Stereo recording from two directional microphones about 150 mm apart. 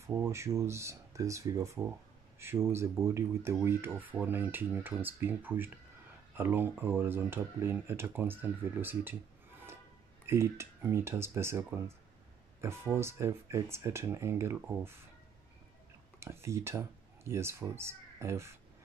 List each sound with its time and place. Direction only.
0.0 s speech: 20° right (ahead or behind)
10.2 s speech: 20° right (ahead or behind)
16.2 s speech: 20° right (ahead or behind)